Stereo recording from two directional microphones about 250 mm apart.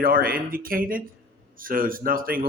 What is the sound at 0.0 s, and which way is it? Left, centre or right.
A man's voice, right.